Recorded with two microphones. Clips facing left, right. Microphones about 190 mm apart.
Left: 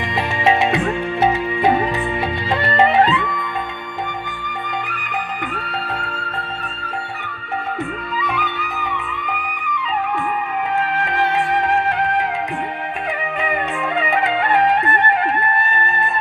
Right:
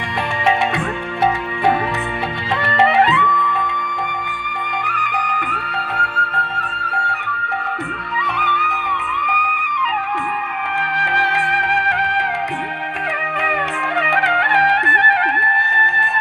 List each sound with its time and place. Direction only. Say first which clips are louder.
2.6 s music: even; 15° left (ahead or behind)
11.5 s music: left 3 dB; 90° right
14.0 s music: left 1 dB; 80° right